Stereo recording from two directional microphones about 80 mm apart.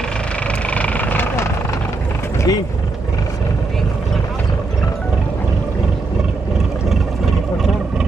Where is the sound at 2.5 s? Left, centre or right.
Left.